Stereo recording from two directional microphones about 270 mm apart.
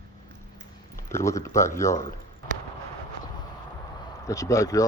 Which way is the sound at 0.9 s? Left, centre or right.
Centre.